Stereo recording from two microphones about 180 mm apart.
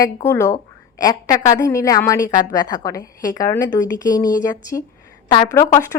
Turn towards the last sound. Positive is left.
turn(degrees=20)  # may be behind; listen again after turning